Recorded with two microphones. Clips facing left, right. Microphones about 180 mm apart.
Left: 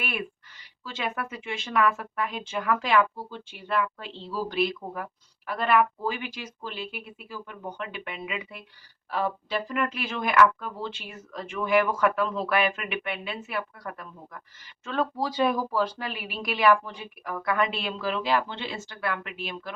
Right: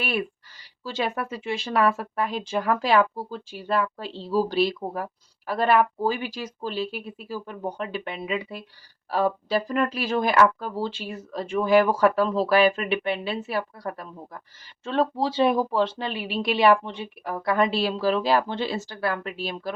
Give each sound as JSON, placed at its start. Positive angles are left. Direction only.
{"t": 0.9, "sound": "speech", "side_deg": -35}